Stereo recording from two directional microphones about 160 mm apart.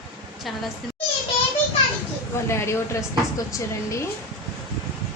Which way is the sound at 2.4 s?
15° left (ahead or behind).